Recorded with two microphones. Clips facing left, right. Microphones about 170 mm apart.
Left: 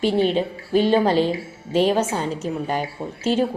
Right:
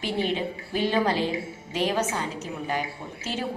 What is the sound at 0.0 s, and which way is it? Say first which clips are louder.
A woman's voice: left 8 dB; 30° left (ahead or behind).